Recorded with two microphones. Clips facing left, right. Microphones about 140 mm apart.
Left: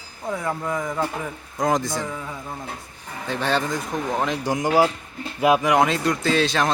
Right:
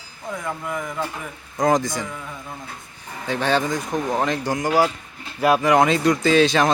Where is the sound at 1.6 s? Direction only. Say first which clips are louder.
Right 3 dB; centre (ahead or behind).